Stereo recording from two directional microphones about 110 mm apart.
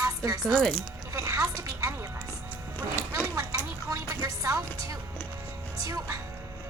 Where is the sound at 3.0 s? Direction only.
20° left (ahead or behind).